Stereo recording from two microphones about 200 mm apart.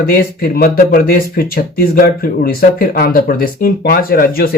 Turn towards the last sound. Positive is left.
turn(degrees=45)  # may be behind; listen again after turning